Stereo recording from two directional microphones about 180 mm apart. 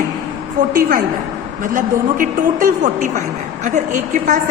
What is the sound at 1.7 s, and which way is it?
A woman's voice, 50° right (ahead or behind).